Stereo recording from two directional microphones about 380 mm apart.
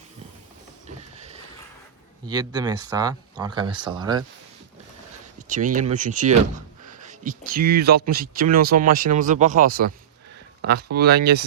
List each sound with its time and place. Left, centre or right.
2.2 s speech: centre
5.4 s speech: centre
10.9 s speech: right